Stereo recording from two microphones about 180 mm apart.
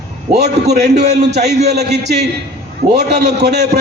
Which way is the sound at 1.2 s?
65° right (ahead or behind).